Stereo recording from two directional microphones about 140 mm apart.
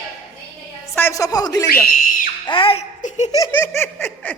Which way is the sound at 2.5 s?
40° left (ahead or behind).